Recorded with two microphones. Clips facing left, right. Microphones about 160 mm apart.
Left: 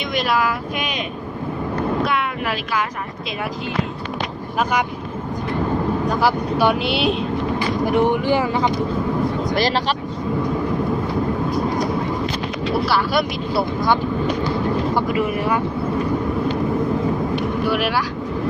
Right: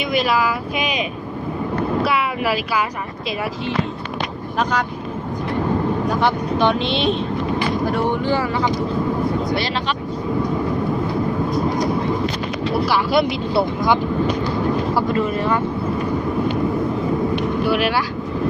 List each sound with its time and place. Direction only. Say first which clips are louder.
0.1 s speech: right 1 dB; 5° right (ahead or behind)
2.0 s speech: right 2 dB; 5° right (ahead or behind)
6.1 s speech: even; 5° left (ahead or behind)
7.9 s speech: left 5 dB; 15° left (ahead or behind)
12.8 s speech: right 4 dB; 20° right (ahead or behind)
15.1 s speech: right 1 dB; 10° left (ahead or behind)
17.7 s speech: right 2 dB; centre (ahead or behind)